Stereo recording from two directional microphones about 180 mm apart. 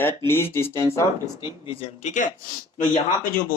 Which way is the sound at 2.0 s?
45° left (ahead or behind).